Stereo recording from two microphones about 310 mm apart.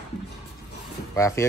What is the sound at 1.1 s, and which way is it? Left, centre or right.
Speech, centre.